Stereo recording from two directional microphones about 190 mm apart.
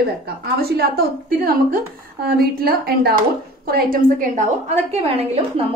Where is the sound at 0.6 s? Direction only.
55° right (ahead or behind).